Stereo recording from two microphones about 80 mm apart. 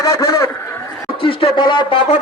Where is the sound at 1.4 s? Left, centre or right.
Left.